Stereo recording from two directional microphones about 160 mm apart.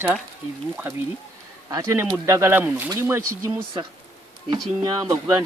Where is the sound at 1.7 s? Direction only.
20° right (ahead or behind).